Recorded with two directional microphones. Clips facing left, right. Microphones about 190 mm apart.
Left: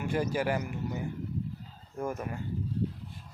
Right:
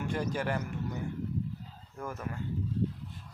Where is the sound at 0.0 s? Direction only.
10° left (ahead or behind).